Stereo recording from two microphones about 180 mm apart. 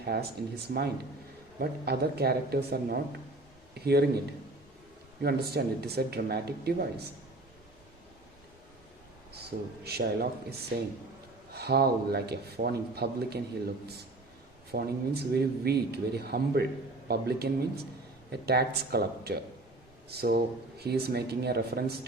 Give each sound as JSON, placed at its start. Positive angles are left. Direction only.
{"t": 0.0, "sound": "speech", "side_deg": -60}
{"t": 5.2, "sound": "speech", "side_deg": -65}
{"t": 9.3, "sound": "speech", "side_deg": -65}
{"t": 11.5, "sound": "speech", "side_deg": -60}
{"t": 14.7, "sound": "speech", "side_deg": -60}